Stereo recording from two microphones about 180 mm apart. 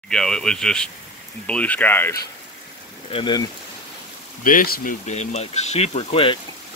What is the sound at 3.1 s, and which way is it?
Speech, 25° left (ahead or behind).